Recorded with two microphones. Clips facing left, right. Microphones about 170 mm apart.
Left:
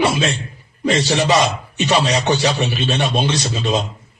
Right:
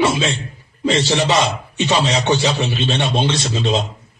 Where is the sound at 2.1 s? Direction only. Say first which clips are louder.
Even; 25° right (ahead or behind).